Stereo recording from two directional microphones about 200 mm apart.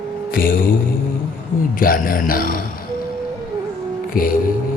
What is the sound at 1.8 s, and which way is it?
Speech, 45° left (ahead or behind).